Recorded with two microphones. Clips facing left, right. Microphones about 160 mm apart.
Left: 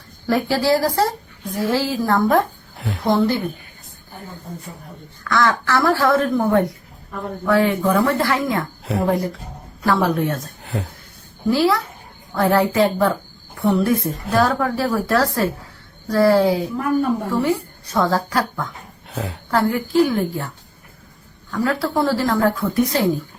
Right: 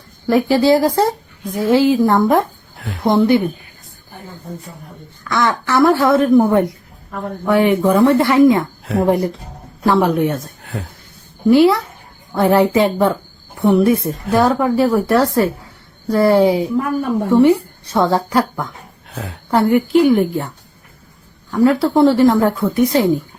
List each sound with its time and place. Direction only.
0.3 s speech: 15° right (ahead or behind)
2.7 s a sound: centre (ahead or behind)
3.0 s speech: 20° right (ahead or behind)
5.2 s speech: 20° right (ahead or behind)
8.8 s speech: centre (ahead or behind)
9.0 s speech: 25° right (ahead or behind)
10.6 s a sound: centre (ahead or behind)
11.5 s speech: 20° right (ahead or behind)
19.1 s a woman's voice: centre (ahead or behind)
19.5 s speech: 20° right (ahead or behind)
21.5 s speech: 20° right (ahead or behind)